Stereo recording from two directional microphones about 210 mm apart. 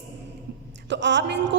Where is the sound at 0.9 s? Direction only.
60° right (ahead or behind).